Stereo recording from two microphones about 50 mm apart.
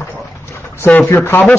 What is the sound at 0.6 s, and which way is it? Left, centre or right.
Speech, left.